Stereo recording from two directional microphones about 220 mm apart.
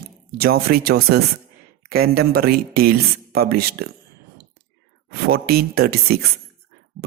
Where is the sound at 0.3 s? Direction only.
45° right (ahead or behind).